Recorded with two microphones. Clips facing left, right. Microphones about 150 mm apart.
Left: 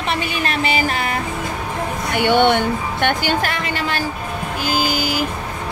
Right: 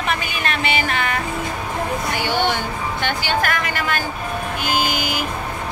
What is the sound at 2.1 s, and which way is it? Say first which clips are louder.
Speech: left 9 dB; 60° left (ahead or behind).